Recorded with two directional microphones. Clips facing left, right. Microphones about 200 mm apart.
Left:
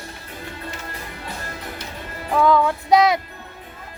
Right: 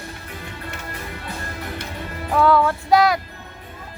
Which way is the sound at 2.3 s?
15° left (ahead or behind).